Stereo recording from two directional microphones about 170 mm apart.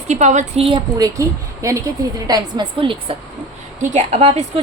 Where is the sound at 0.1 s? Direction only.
45° right (ahead or behind).